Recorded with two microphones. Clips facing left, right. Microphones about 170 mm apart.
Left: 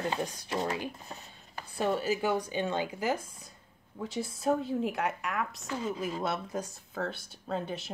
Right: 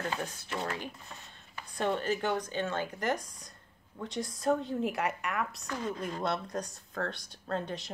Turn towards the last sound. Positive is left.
turn(degrees=5)  # may be behind; listen again after turning